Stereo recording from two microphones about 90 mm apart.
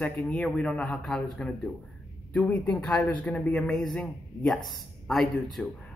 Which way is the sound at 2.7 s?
10° left (ahead or behind).